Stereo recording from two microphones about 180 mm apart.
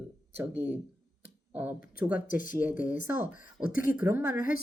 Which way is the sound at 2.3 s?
50° left (ahead or behind).